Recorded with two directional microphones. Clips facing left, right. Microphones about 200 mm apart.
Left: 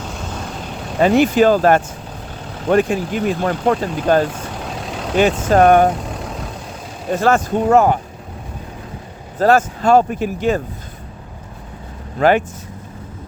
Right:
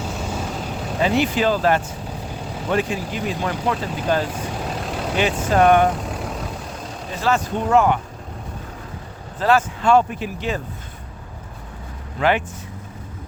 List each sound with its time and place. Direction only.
0.0 s vehicle: 5° right (ahead or behind)
0.9 s speech: 50° left (ahead or behind)
7.1 s speech: 50° left (ahead or behind)
9.4 s speech: 45° left (ahead or behind)
12.2 s speech: 40° left (ahead or behind)